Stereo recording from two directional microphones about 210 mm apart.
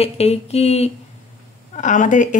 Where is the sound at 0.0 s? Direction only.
30° left (ahead or behind).